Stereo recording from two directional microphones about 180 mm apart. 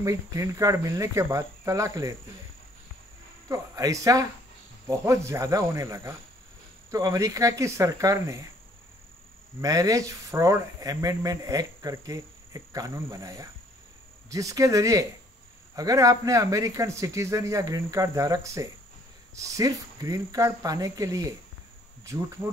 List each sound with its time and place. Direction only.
0.0 s speech: 20° right (ahead or behind)
3.4 s speech: 20° right (ahead or behind)
9.6 s speech: 20° right (ahead or behind)